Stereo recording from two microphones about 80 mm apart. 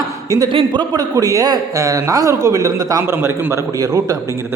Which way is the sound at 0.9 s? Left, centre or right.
Right.